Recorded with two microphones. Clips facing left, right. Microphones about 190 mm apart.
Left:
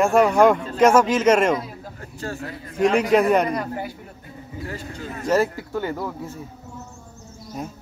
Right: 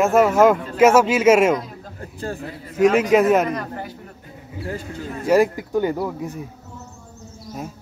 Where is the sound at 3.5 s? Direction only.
10° left (ahead or behind).